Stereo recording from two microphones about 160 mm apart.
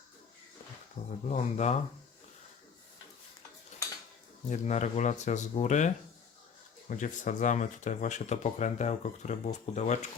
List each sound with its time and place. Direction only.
1.0 s speech: 50° left (ahead or behind)
4.4 s speech: 45° left (ahead or behind)